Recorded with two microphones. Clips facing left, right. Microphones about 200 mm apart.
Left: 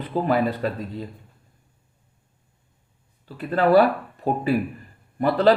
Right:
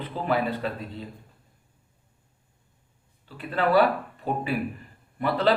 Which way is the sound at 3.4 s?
40° left (ahead or behind).